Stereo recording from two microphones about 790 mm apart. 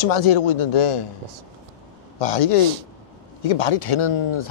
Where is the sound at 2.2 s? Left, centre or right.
Left.